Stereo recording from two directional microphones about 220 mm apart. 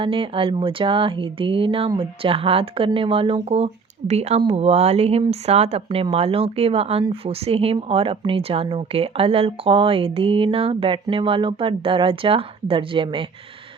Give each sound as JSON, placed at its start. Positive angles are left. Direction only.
{"t": 0.0, "sound": "speech", "side_deg": -25}